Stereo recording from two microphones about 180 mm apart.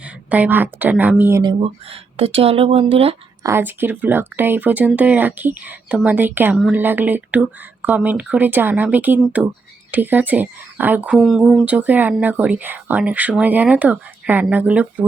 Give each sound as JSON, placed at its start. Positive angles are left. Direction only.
{"t": 0.0, "sound": "a woman's voice", "side_deg": -10}
{"t": 1.4, "sound": "speech", "side_deg": -30}
{"t": 3.4, "sound": "speech", "side_deg": -10}